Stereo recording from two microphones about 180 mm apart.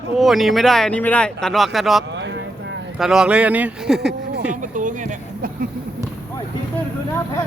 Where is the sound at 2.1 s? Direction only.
80° right.